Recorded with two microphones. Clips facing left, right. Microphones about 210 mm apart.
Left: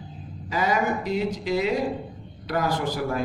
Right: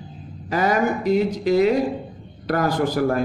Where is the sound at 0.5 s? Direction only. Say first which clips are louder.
Right 4 dB; 50° right (ahead or behind).